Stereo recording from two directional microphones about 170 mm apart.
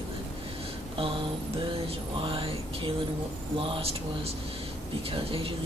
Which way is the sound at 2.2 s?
30° right (ahead or behind).